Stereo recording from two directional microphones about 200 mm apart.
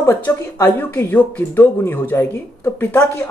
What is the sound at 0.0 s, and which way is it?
Speech, 10° left (ahead or behind).